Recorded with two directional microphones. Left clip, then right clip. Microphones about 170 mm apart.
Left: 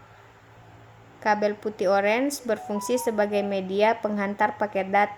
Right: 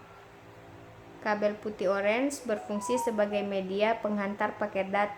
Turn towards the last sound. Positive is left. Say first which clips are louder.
# left 6 dB
turn(degrees=35)  # may be behind; listen again after turning